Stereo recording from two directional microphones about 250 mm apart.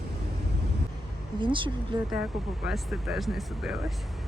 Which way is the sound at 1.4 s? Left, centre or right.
Centre.